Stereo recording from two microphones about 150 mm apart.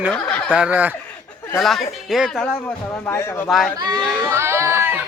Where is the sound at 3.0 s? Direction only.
15° left (ahead or behind).